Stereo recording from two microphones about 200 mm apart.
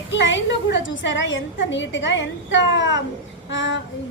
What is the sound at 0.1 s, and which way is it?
A woman's voice, 65° left (ahead or behind).